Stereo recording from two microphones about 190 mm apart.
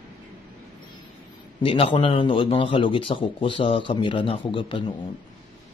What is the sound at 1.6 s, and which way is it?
A man's voice, 30° left (ahead or behind).